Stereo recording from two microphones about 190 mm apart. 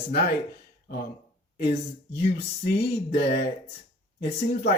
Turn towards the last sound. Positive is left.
turn(degrees=60)  # may be behind; listen again after turning